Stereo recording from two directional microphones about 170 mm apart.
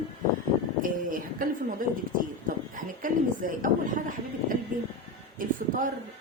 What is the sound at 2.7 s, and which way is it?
A woman's voice, 50° right (ahead or behind).